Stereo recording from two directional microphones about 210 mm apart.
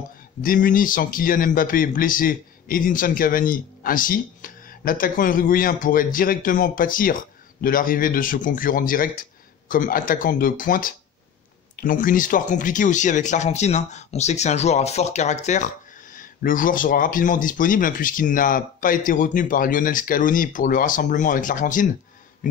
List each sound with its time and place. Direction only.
0.4 s speech: 40° left (ahead or behind)